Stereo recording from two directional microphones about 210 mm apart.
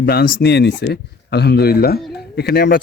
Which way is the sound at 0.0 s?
50° left (ahead or behind).